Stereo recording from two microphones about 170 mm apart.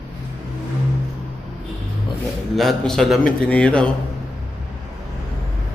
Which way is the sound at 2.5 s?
Centre (ahead or behind).